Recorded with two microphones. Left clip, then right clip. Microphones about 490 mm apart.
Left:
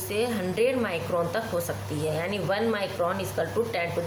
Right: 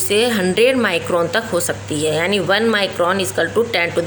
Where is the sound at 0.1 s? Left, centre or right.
Left.